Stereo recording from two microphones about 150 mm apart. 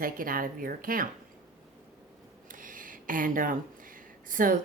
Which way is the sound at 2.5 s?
65° right (ahead or behind).